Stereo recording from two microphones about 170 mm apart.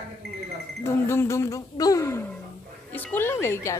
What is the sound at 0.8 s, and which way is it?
Speech, 15° left (ahead or behind).